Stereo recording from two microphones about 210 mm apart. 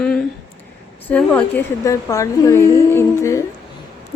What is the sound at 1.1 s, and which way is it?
A child's voice, 5° left (ahead or behind).